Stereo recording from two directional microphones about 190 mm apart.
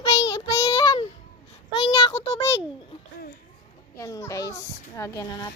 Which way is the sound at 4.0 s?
15° left (ahead or behind).